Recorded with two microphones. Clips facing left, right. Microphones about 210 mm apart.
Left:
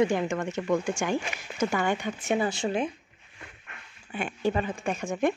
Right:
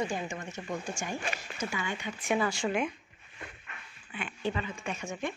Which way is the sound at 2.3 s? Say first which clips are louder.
Left 2 dB; 25° left (ahead or behind).